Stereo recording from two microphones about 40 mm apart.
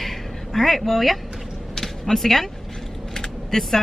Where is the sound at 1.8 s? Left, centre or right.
Centre.